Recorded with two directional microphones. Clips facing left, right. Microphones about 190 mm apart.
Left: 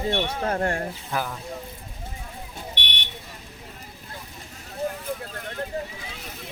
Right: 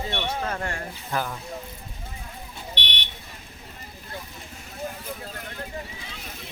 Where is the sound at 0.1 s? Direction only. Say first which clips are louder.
Left 4 dB; 40° left (ahead or behind).